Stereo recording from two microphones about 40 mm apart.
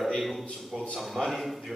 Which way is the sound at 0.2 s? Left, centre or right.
Centre.